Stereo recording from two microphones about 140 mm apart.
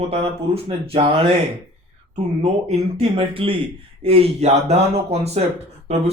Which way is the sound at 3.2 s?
40° right (ahead or behind).